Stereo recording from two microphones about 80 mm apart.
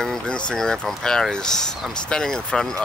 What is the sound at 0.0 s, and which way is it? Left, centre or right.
Speech, centre.